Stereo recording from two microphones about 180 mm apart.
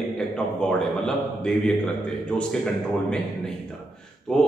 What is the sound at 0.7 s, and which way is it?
Speech, 5° left (ahead or behind).